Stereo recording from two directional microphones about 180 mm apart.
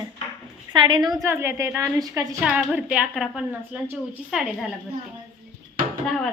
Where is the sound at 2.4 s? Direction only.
5° right (ahead or behind).